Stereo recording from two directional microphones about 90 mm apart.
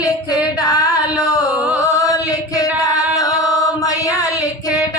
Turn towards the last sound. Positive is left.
turn(degrees=40)  # may be behind; listen again after turning